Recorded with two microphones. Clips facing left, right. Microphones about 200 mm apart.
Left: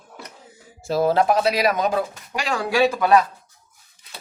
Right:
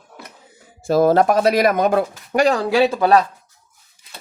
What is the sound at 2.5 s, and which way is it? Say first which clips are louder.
Speech: left 1 dB; 30° right (ahead or behind).